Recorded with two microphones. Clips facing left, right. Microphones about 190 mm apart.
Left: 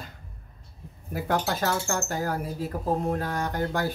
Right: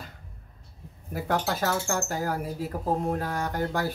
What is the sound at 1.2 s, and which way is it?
Speech, centre (ahead or behind).